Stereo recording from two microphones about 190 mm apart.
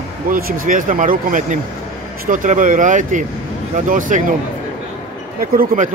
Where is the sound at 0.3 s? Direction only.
50° right (ahead or behind).